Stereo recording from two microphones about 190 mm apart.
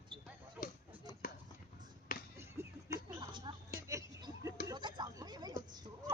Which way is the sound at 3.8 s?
15° right (ahead or behind).